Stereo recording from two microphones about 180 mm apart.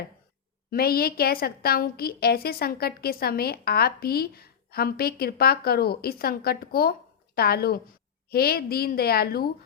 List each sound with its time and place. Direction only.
0.7 s a woman's voice: 55° left (ahead or behind)